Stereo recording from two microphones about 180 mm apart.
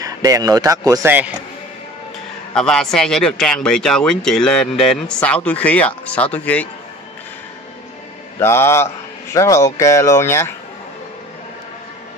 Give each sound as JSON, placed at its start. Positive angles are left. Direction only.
{"t": 0.0, "sound": "speech", "side_deg": -20}
{"t": 2.5, "sound": "speech", "side_deg": 5}
{"t": 8.4, "sound": "speech", "side_deg": 15}